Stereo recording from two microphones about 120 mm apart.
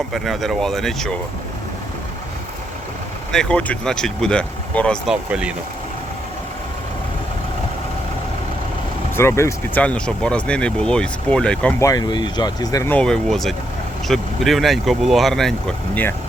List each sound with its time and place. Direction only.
0.1 s speech: centre (ahead or behind)
3.3 s speech: 10° left (ahead or behind)
5.0 s speech: 5° right (ahead or behind)
9.1 s speech: 20° left (ahead or behind)
9.8 s speech: 10° left (ahead or behind)
11.8 s speech: 30° left (ahead or behind)
12.9 s speech: 5° left (ahead or behind)